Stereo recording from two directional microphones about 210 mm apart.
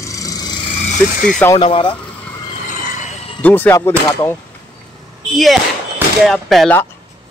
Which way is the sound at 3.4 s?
10° left (ahead or behind).